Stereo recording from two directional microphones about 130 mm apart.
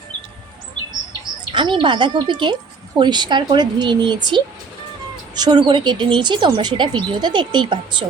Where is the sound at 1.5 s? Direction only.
40° right (ahead or behind).